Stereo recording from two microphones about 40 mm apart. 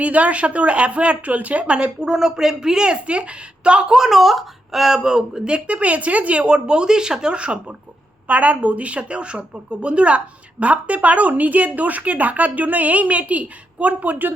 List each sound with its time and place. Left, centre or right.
0.0 s a woman's voice: right
1.7 s speech: right
2.0 s a woman's voice: centre
3.9 s speech: centre; by 7.6 s right
8.3 s a woman's voice: right